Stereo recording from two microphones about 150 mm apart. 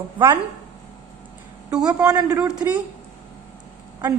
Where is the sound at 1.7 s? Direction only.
5° right (ahead or behind).